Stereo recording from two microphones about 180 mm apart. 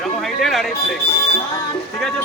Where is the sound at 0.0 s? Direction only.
Centre (ahead or behind).